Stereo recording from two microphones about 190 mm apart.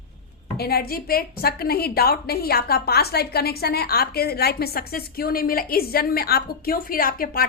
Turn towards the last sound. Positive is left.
turn(degrees=50)  # may be behind; listen again after turning